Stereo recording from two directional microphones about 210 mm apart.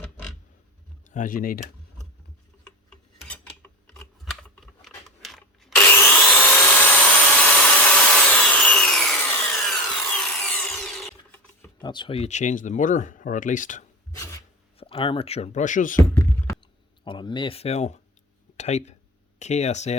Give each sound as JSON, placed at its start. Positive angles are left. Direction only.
{"t": 1.0, "sound": "speech", "side_deg": 35}
{"t": 2.9, "sound": "a sound", "side_deg": 5}
{"t": 5.7, "sound": "wood", "side_deg": 10}
{"t": 11.8, "sound": "speech", "side_deg": 20}
{"t": 14.1, "sound": "rub", "side_deg": 15}
{"t": 14.8, "sound": "speech", "side_deg": 25}
{"t": 16.0, "sound": "a sound", "side_deg": 15}
{"t": 17.0, "sound": "speech", "side_deg": 20}